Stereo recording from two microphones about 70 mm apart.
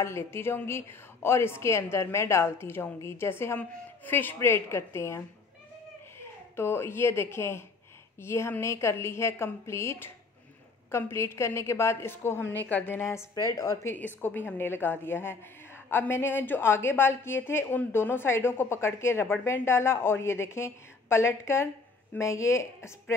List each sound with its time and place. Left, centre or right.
0.0 s a woman's voice: left
3.5 s a woman's voice: left
13.0 s a woman's voice: left